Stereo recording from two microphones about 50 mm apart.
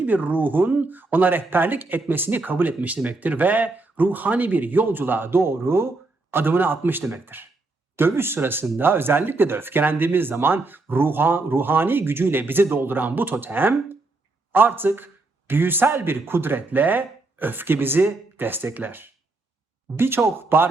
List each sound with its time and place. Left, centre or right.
0.0 s speech: right